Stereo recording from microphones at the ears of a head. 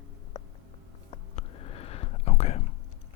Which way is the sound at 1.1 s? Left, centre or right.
Left.